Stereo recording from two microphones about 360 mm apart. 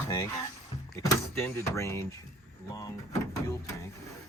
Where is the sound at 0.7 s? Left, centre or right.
Centre.